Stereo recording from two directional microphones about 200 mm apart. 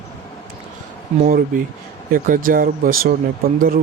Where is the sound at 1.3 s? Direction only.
45° right (ahead or behind).